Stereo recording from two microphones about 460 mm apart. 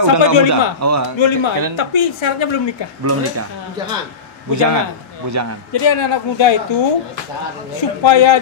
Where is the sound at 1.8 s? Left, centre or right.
Left.